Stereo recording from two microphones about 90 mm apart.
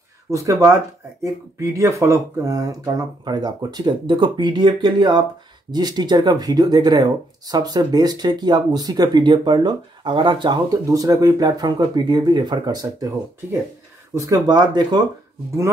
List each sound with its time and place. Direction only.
0.3 s speech: 35° right (ahead or behind); by 10.8 s 60° right (ahead or behind)
10.9 s speech: 40° right (ahead or behind)
14.1 s speech: 40° right (ahead or behind); by 15.0 s 55° right (ahead or behind)